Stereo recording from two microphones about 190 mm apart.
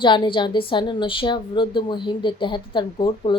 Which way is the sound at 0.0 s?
25° left (ahead or behind).